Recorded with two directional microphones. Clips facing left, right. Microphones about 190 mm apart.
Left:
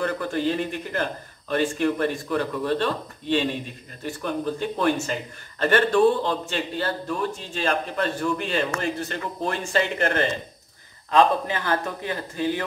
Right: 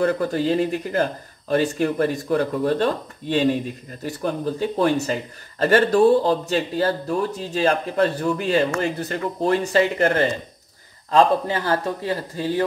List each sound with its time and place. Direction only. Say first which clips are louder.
0.0 s a man's voice: right 4 dB; 35° right (ahead or behind)